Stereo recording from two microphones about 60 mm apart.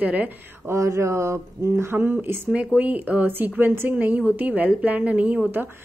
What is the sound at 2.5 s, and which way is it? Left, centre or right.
A woman's voice, right.